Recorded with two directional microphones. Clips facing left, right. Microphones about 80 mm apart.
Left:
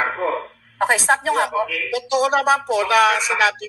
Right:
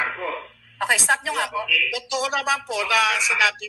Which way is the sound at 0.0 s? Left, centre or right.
Left.